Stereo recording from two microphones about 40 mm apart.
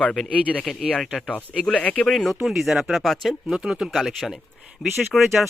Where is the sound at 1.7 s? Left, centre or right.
Left.